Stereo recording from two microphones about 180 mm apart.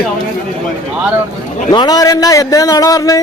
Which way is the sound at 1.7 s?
20° left (ahead or behind).